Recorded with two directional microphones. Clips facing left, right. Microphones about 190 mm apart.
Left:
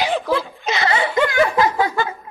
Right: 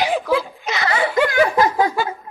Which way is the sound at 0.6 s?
25° left (ahead or behind).